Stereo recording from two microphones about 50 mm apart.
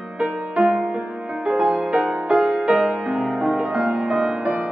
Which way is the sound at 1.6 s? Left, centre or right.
Right.